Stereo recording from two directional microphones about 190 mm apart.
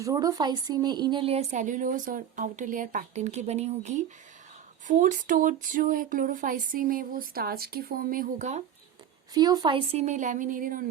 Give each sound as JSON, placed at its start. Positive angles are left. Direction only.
{"t": 0.0, "sound": "a woman's voice", "side_deg": -20}
{"t": 4.9, "sound": "a sound", "side_deg": -40}
{"t": 9.3, "sound": "a woman's voice", "side_deg": -20}